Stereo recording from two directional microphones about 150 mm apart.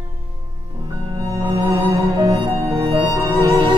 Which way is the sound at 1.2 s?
25° right (ahead or behind).